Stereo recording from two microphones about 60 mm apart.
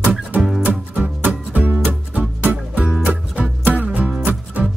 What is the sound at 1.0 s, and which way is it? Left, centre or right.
Music, right.